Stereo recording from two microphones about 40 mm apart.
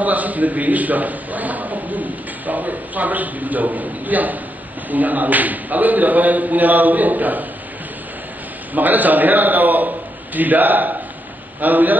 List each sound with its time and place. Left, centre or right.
0.0 s a man's voice: right
8.7 s a man's voice: right